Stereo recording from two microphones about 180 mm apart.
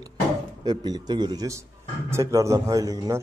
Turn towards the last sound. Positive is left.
turn(degrees=-20)  # may be behind; listen again after turning